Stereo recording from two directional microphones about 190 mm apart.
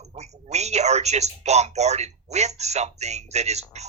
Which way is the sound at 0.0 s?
35° right (ahead or behind).